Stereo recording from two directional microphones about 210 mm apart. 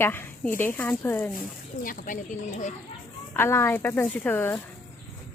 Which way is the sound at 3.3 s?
10° left (ahead or behind).